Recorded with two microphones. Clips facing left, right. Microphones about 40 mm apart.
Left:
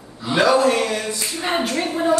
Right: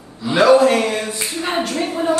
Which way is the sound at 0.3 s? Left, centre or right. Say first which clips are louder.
Right 4 dB; right.